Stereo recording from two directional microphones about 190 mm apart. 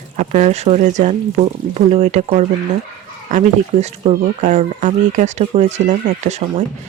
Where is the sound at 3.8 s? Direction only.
35° right (ahead or behind).